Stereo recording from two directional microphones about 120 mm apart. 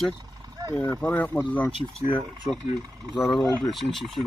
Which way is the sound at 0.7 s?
15° left (ahead or behind).